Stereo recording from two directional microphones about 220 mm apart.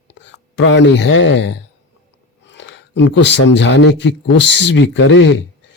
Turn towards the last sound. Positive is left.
turn(degrees=55)  # may be behind; listen again after turning